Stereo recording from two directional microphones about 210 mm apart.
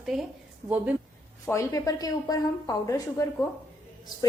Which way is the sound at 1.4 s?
15° left (ahead or behind).